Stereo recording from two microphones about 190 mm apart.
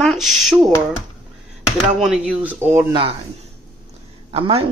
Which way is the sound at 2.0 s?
5° right (ahead or behind).